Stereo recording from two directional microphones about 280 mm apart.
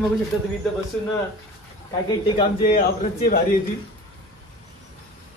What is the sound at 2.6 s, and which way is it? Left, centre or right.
Speech, left.